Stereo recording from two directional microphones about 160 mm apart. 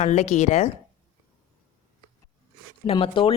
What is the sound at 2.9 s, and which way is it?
Speech, 35° left (ahead or behind).